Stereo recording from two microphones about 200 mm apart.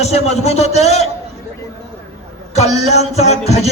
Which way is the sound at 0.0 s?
35° left (ahead or behind).